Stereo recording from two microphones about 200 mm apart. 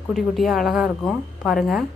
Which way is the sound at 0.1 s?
Centre (ahead or behind).